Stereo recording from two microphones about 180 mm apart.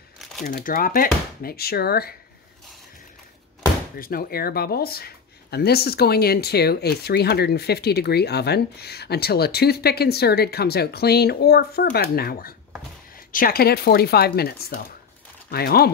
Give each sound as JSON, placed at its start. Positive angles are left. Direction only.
{"t": 0.4, "sound": "speech", "side_deg": 50}
{"t": 4.0, "sound": "speech", "side_deg": 55}